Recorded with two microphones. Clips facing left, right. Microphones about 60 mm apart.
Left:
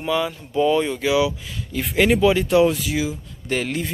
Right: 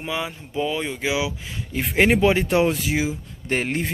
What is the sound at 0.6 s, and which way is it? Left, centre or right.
Speech, centre.